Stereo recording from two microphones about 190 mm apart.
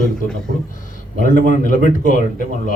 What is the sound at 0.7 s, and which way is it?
A man's voice, 45° left (ahead or behind).